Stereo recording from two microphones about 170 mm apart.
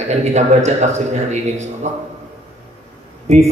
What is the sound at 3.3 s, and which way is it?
Speech, 40° right (ahead or behind).